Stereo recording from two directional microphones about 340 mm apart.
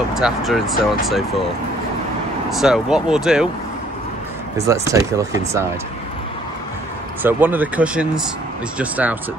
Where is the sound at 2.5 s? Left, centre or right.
Centre.